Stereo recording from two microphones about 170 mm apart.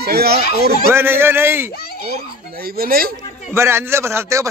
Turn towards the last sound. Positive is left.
turn(degrees=-15)  # may be behind; listen again after turning